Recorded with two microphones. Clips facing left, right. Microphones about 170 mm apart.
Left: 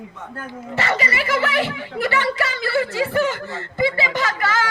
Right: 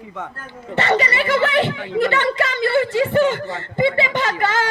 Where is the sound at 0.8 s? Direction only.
30° right (ahead or behind).